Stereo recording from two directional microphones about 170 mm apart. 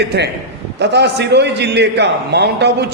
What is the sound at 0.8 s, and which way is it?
A man's voice, 90° right.